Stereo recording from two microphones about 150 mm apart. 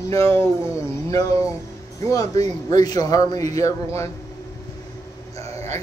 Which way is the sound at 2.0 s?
25° left (ahead or behind).